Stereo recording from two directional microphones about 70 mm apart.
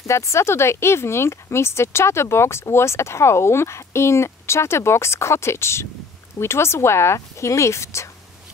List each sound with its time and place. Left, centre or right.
0.0 s speech: left